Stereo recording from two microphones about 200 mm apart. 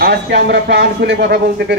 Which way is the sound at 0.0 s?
55° right (ahead or behind).